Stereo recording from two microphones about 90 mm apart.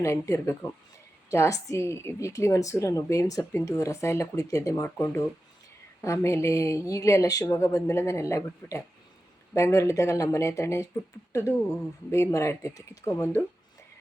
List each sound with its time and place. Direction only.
0.0 s a woman's voice: 30° left (ahead or behind)